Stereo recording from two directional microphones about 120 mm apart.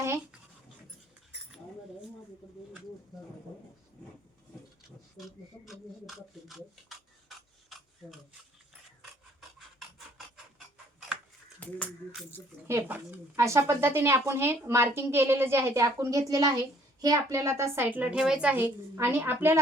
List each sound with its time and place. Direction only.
5.1 s rub: centre (ahead or behind)
11.6 s a sound: 15° left (ahead or behind)
12.6 s a woman's voice: 20° right (ahead or behind)